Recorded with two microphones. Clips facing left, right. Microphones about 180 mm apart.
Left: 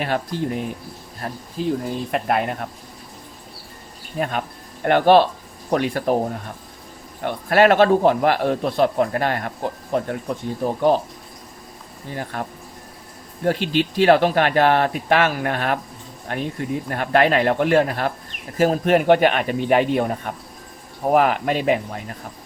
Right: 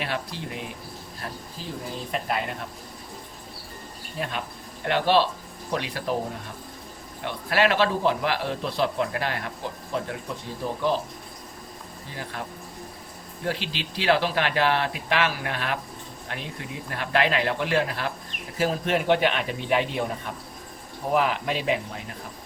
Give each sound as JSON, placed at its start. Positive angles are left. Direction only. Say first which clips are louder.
{"t": 0.0, "sound": "a man's voice", "louder": "left 8 dB", "side_deg": 45}
{"t": 2.1, "sound": "speech", "louder": "left 6 dB", "side_deg": 55}
{"t": 4.2, "sound": "a man's voice", "louder": "left 7 dB", "side_deg": 50}
{"t": 7.2, "sound": "a man's voice", "louder": "left 7 dB", "side_deg": 50}
{"t": 12.1, "sound": "a man's voice", "louder": "left 7 dB", "side_deg": 50}